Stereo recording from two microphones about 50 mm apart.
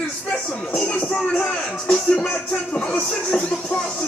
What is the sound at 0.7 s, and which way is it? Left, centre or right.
Speech, centre.